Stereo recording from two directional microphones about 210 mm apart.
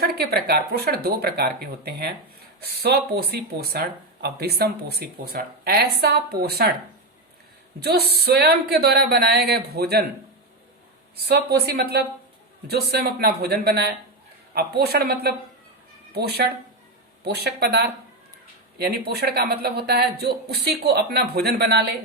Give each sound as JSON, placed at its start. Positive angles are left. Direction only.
{"t": 0.0, "sound": "speech", "side_deg": -50}
{"t": 7.8, "sound": "speech", "side_deg": -50}
{"t": 11.2, "sound": "speech", "side_deg": -50}